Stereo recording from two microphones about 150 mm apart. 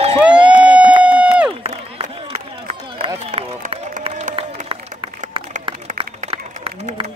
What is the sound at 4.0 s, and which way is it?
Crowd, 45° right (ahead or behind).